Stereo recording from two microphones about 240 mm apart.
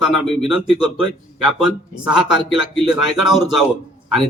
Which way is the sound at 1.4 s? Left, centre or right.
Centre.